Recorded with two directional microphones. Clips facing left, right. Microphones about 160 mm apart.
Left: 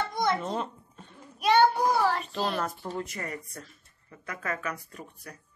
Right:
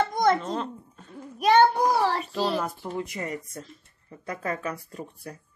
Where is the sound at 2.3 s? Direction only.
5° right (ahead or behind).